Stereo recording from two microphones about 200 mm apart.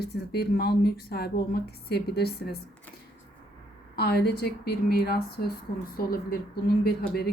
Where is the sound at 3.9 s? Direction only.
55° left (ahead or behind).